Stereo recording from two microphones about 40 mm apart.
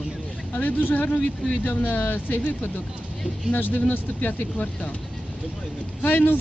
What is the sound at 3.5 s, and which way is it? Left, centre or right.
Speech, left.